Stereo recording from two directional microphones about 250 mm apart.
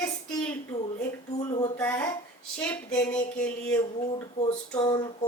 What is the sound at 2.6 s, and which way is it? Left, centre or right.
Speech, centre.